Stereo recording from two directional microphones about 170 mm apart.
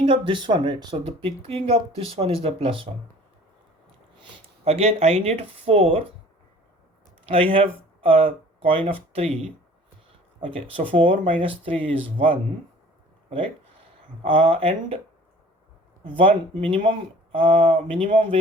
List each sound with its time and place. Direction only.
0.0 s speech: 30° right (ahead or behind)
4.2 s speech: 35° right (ahead or behind)
7.3 s speech: 35° right (ahead or behind)
10.4 s speech: 30° right (ahead or behind)
14.3 s speech: 30° right (ahead or behind)
16.0 s speech: 30° right (ahead or behind)